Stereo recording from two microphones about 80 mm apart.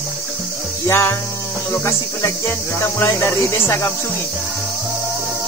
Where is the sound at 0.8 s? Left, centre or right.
Left.